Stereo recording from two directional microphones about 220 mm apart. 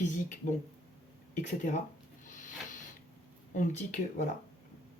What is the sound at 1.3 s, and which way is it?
Speech, 35° left (ahead or behind).